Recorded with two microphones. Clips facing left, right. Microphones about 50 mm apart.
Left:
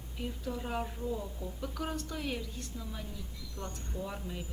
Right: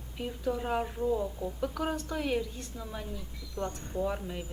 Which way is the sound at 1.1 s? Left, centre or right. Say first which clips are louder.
Right 7 dB; right.